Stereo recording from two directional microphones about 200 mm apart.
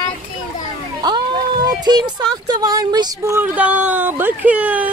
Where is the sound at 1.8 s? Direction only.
20° right (ahead or behind).